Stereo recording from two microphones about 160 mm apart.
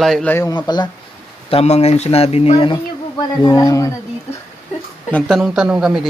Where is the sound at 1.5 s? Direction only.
40° left (ahead or behind); by 3.9 s 20° left (ahead or behind).